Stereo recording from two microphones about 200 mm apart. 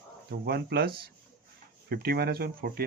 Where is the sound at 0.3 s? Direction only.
50° right (ahead or behind).